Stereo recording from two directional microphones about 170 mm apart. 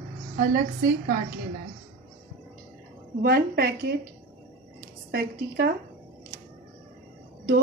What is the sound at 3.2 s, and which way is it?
Speech, 65° right (ahead or behind).